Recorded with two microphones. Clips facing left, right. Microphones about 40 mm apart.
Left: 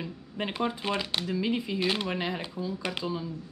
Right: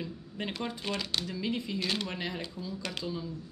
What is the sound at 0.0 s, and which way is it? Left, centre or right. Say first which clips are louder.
Speech: left 3 dB; left.